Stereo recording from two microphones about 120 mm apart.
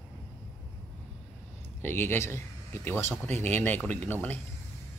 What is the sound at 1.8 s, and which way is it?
Speech, 20° left (ahead or behind).